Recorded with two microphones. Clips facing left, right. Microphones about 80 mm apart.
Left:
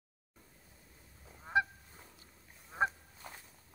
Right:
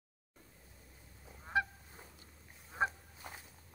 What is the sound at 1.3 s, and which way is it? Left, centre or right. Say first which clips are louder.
Goose: left 3 dB; centre.